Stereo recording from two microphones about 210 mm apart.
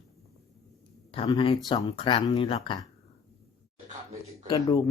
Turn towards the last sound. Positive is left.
turn(degrees=15)  # may be behind; listen again after turning